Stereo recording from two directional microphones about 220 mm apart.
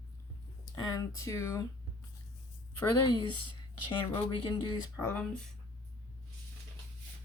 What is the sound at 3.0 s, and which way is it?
Speech, 20° left (ahead or behind).